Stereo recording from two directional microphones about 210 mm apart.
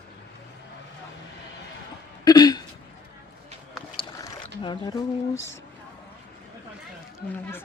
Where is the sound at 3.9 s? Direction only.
25° left (ahead or behind).